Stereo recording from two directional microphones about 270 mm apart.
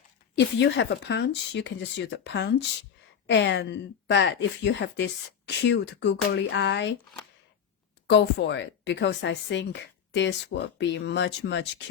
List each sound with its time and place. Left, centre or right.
0.3 s speech: left
8.1 s speech: left